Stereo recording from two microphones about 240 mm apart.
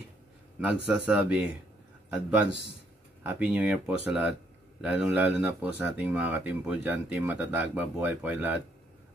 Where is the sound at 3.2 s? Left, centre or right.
Centre.